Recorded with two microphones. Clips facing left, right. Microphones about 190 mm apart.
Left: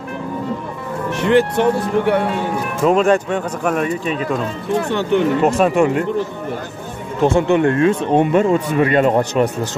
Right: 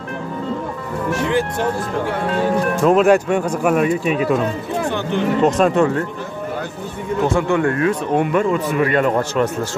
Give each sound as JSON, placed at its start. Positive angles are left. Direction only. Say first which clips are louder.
{"t": 1.2, "sound": "speech", "louder": "left 7 dB", "side_deg": 65}
{"t": 2.7, "sound": "speech", "louder": "left 1 dB", "side_deg": 5}
{"t": 3.0, "sound": "speech", "louder": "right 2 dB", "side_deg": -10}
{"t": 5.4, "sound": "speech", "louder": "even", "side_deg": 10}
{"t": 7.2, "sound": "speech", "louder": "left 4 dB", "side_deg": 20}